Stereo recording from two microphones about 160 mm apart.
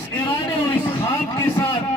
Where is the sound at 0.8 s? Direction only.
15° left (ahead or behind).